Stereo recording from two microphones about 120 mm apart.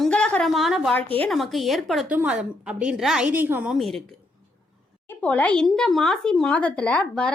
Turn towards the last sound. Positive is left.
turn(degrees=10)  # may be behind; listen again after turning